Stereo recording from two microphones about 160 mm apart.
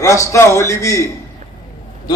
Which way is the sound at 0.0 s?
20° left (ahead or behind).